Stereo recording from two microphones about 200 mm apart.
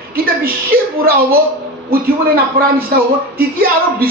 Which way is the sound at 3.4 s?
50° right (ahead or behind).